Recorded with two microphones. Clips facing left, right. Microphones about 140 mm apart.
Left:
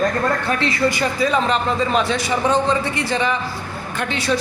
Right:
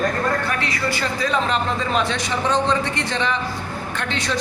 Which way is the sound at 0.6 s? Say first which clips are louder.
Left 5 dB; 20° left (ahead or behind).